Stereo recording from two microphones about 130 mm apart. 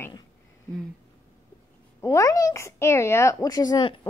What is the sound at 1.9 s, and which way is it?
Speech, 25° left (ahead or behind).